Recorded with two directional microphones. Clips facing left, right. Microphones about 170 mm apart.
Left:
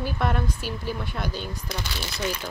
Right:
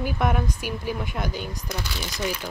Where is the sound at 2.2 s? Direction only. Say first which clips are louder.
Right 1 dB; centre (ahead or behind).